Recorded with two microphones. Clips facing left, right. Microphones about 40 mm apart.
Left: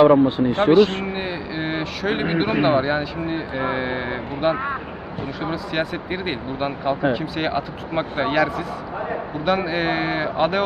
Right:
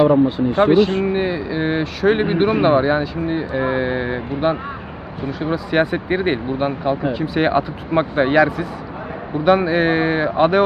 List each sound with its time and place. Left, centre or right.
0.0 s speech: left
1.0 s speech: centre